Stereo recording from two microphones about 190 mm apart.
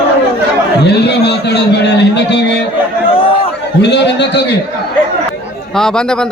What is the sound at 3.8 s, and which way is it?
Speech, 65° left (ahead or behind).